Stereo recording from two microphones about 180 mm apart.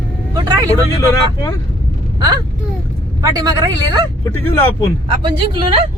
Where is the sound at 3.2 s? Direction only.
20° right (ahead or behind).